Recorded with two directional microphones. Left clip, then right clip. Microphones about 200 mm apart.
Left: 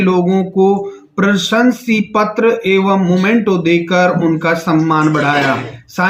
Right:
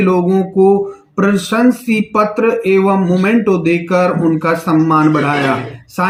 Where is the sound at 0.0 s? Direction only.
Centre (ahead or behind).